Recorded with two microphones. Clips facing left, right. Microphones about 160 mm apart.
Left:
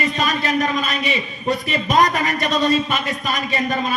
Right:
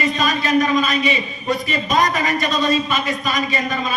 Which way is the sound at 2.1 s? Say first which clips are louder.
Even; 60° left (ahead or behind).